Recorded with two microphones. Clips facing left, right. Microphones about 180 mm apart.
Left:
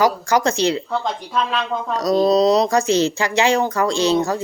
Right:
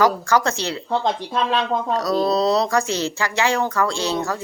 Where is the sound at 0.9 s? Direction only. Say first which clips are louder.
Right 2 dB; 35° right (ahead or behind).